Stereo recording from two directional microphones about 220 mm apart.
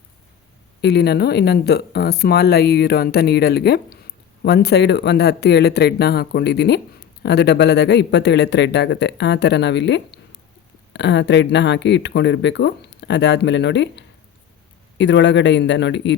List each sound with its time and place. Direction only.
0.8 s speech: 50° left (ahead or behind)